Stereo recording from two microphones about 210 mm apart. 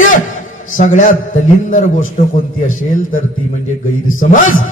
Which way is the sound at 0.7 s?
40° left (ahead or behind).